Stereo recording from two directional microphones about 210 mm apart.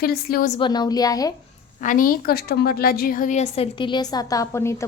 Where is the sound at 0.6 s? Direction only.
20° left (ahead or behind).